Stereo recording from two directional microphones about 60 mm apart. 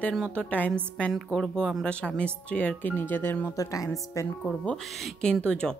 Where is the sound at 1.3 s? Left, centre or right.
Centre.